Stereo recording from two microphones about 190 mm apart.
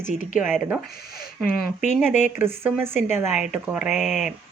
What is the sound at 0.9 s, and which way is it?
Speech, 55° left (ahead or behind).